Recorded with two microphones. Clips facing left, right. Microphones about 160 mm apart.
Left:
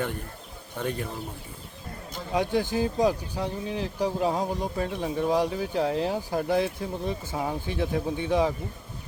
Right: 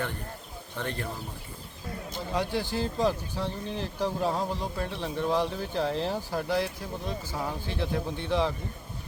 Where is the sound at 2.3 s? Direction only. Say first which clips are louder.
Left 5 dB; 20° left (ahead or behind).